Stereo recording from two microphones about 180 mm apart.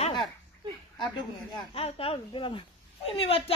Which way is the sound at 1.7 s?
30° left (ahead or behind).